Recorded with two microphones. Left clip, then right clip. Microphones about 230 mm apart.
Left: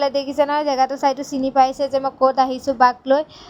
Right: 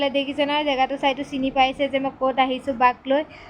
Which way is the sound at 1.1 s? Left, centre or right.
Left.